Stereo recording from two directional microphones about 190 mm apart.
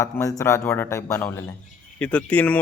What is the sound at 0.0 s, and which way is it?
Speech, 15° left (ahead or behind).